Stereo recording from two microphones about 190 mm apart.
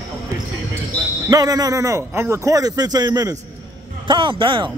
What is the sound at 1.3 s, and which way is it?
A man's voice, 20° right (ahead or behind).